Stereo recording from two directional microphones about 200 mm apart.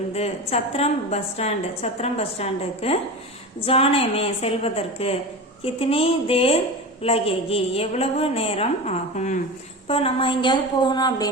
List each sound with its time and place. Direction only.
0.1 s a woman's voice: 30° left (ahead or behind)